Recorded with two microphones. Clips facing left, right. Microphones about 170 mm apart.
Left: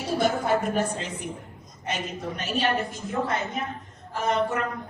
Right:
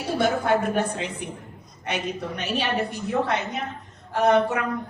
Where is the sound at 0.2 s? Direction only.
60° right (ahead or behind).